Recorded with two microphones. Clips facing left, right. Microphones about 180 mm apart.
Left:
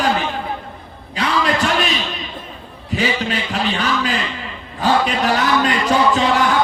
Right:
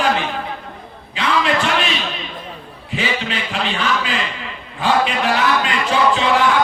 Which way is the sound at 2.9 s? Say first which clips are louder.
Left 3 dB; 40° left (ahead or behind).